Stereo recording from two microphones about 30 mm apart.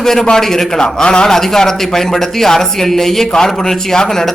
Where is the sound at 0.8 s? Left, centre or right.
Left.